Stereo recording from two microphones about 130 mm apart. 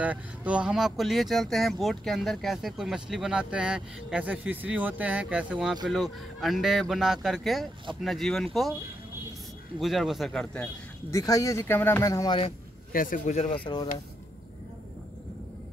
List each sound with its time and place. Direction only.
0.0 s speech: 10° right (ahead or behind)
9.8 s speech: centre (ahead or behind)
11.1 s speech: 25° left (ahead or behind)
12.9 s speech: 90° left
13.2 s speech: 55° left (ahead or behind)